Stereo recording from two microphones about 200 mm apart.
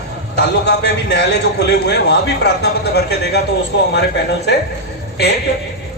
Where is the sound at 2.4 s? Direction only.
60° left (ahead or behind).